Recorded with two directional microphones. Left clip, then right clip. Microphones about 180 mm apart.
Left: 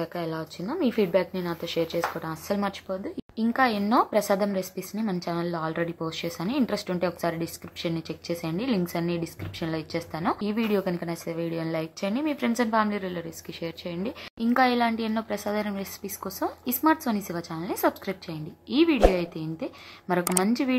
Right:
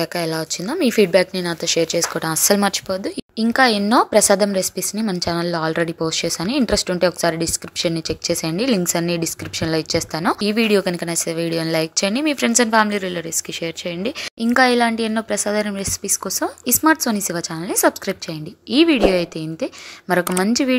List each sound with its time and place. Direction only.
0.0 s a woman's voice: 40° right (ahead or behind)